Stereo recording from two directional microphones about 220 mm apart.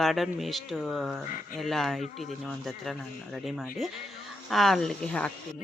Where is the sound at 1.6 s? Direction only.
Centre (ahead or behind).